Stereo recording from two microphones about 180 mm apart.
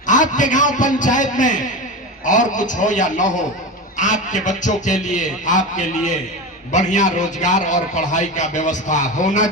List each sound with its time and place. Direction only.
0.1 s a man's voice: 45° left (ahead or behind)